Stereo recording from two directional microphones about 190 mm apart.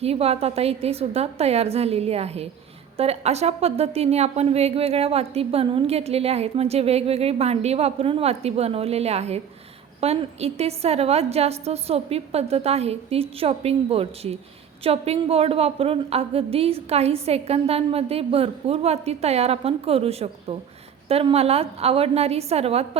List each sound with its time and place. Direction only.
0.0 s a woman's voice: 30° right (ahead or behind)